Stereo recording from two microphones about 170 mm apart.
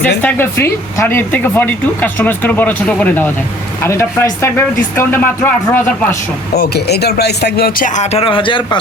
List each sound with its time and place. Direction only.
0.0 s speech: 10° left (ahead or behind)
6.5 s speech: 70° left (ahead or behind)
7.9 s a man's voice: 35° left (ahead or behind)